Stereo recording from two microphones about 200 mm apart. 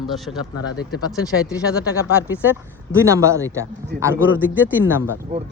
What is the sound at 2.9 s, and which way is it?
Speech, 15° right (ahead or behind).